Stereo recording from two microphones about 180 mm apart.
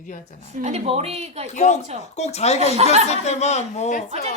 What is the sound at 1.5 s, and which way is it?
Speech, 40° left (ahead or behind).